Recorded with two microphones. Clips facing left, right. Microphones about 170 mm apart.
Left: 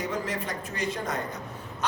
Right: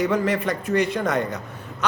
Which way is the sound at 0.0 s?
70° right (ahead or behind).